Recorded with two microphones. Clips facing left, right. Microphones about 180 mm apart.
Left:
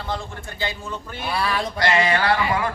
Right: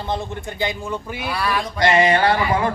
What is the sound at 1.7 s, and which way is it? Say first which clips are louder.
Music: right 5 dB; 20° right (ahead or behind).